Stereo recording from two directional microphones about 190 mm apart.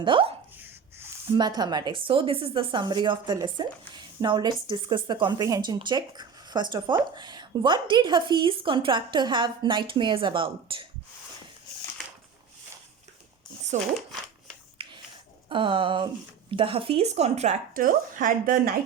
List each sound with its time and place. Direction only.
0.0 s speech: 25° right (ahead or behind)
0.5 s plop: 10° right (ahead or behind)
1.3 s speech: 20° right (ahead or behind)
13.7 s a woman's voice: 40° right (ahead or behind)
14.8 s a sound: 30° right (ahead or behind)
15.4 s a woman's voice: 25° right (ahead or behind); by 18.7 s 45° right (ahead or behind)